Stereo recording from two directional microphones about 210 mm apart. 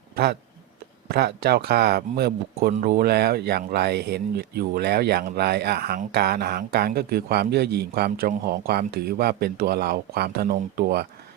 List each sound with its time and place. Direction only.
1.1 s speech: 50° right (ahead or behind)